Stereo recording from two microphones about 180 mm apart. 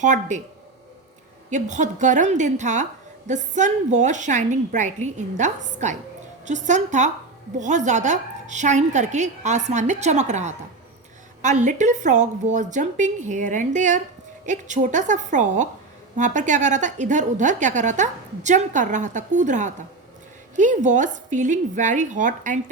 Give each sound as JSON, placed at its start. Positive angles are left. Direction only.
{"t": 0.0, "sound": "a woman's voice", "side_deg": -40}
{"t": 1.5, "sound": "a woman's voice", "side_deg": -40}